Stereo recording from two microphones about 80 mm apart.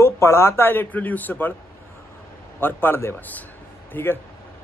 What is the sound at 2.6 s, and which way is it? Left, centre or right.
A man's voice, left.